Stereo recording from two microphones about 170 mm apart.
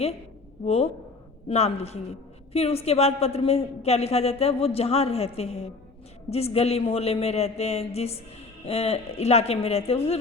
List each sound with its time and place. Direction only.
0.6 s a woman's voice: 35° left (ahead or behind)